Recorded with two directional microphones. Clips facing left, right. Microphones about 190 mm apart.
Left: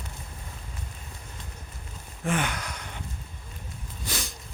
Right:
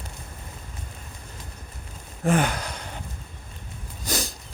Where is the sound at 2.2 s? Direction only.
40° right (ahead or behind).